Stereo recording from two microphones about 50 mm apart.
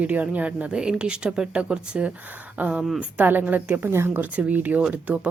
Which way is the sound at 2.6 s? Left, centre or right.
Right.